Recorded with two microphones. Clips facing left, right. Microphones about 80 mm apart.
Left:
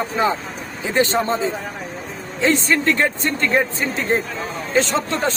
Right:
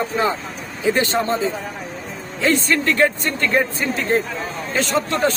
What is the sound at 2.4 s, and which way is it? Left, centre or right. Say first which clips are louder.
Speech: left 1 dB; left.